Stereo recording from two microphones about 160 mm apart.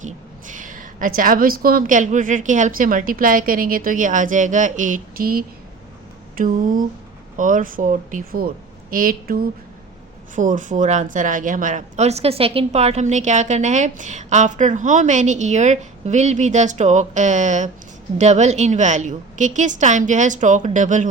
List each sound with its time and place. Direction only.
0.0 s a woman's voice: 55° right (ahead or behind)